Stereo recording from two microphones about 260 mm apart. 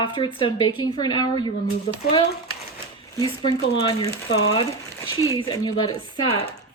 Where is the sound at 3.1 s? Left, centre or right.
Centre.